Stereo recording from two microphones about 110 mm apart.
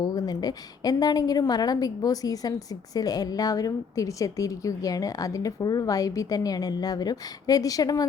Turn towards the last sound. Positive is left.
turn(degrees=35)  # may be behind; listen again after turning